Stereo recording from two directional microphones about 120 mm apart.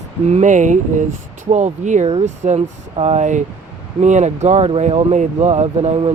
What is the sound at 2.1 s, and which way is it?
Speech, 65° right (ahead or behind).